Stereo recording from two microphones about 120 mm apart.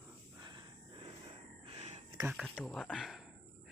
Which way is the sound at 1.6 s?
65° right (ahead or behind).